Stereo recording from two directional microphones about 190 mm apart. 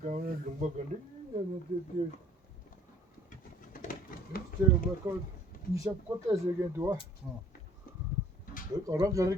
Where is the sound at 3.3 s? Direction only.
45° left (ahead or behind).